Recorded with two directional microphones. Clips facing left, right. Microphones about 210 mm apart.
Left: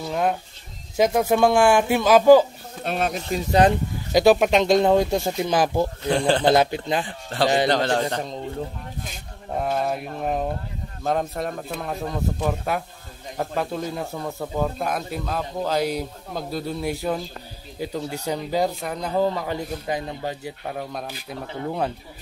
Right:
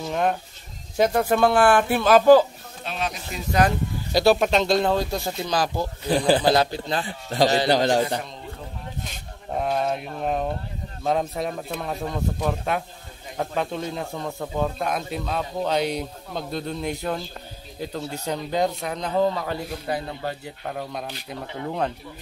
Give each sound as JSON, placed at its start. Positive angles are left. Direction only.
{"t": 0.0, "sound": "a sound", "side_deg": 0}
{"t": 0.9, "sound": "speech", "side_deg": 10}
{"t": 2.8, "sound": "speech", "side_deg": 50}
{"t": 3.6, "sound": "speech", "side_deg": 15}
{"t": 6.0, "sound": "speech", "side_deg": -5}
{"t": 6.5, "sound": "a man's voice", "side_deg": 20}
{"t": 7.7, "sound": "a man's voice", "side_deg": -10}
{"t": 9.6, "sound": "speech", "side_deg": 0}